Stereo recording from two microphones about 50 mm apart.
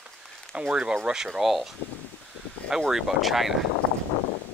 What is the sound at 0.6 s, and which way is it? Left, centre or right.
Speech, centre.